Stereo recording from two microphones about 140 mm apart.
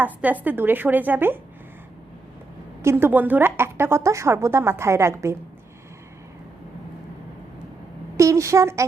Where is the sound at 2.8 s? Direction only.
20° right (ahead or behind).